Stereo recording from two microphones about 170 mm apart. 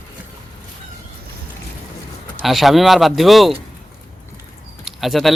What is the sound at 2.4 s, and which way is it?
Speech, centre (ahead or behind).